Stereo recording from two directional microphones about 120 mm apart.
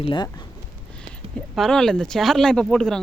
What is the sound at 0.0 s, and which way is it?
Speech, 40° left (ahead or behind).